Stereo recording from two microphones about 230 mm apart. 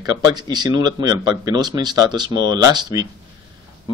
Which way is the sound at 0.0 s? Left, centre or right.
Centre.